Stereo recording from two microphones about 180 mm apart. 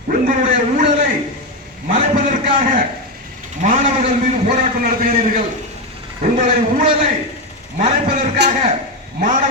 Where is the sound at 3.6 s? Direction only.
45° right (ahead or behind).